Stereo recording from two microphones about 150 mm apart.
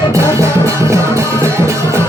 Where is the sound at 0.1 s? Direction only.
20° right (ahead or behind).